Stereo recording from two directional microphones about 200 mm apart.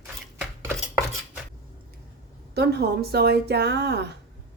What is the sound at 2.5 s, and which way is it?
Speech, 55° right (ahead or behind).